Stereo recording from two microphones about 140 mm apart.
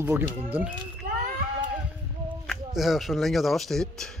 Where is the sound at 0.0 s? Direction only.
15° right (ahead or behind).